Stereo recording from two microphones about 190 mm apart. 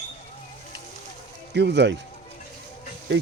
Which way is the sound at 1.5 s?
65° right (ahead or behind).